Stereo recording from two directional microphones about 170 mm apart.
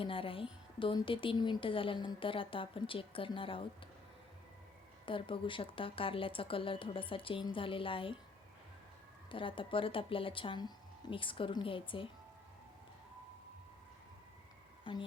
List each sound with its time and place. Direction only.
0.0 s speech: 30° left (ahead or behind)
5.0 s speech: 30° left (ahead or behind)
9.3 s speech: 30° left (ahead or behind)